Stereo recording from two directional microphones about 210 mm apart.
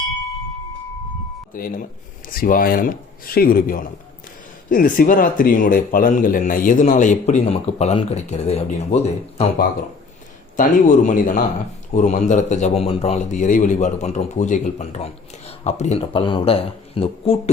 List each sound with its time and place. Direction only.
1.5 s a man's voice: 40° left (ahead or behind)
10.6 s a man's voice: 40° left (ahead or behind)